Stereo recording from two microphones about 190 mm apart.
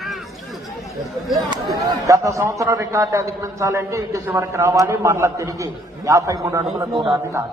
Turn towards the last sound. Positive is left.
turn(degrees=-25)  # may be behind; listen again after turning